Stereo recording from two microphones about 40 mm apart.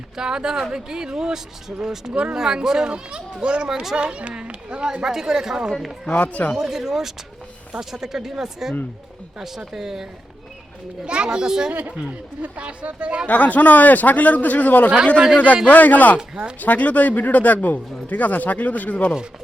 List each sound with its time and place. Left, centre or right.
0.2 s speech: centre
5.0 s speech: centre
6.1 s a man's voice: left
6.6 s speech: centre
11.0 s speech: right
11.7 s speech: right
13.2 s a man's voice: left